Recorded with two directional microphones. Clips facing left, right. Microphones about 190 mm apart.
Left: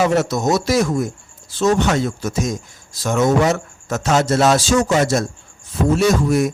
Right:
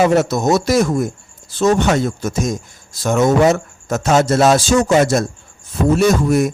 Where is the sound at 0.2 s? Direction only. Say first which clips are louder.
Right 3 dB; 55° right (ahead or behind).